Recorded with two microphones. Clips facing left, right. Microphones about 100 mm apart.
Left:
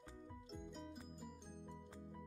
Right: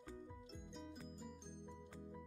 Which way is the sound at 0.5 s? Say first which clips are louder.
Left 4 dB; 5° left (ahead or behind).